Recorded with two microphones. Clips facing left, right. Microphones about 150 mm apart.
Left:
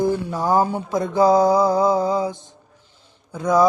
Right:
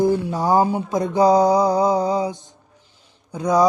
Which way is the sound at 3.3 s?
20° right (ahead or behind).